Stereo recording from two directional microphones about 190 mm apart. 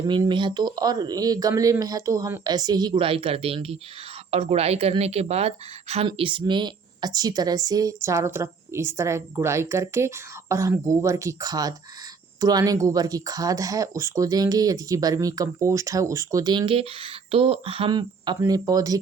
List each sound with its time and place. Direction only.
0.0 s speech: 25° right (ahead or behind)